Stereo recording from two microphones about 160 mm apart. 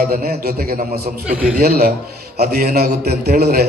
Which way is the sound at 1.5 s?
70° right (ahead or behind).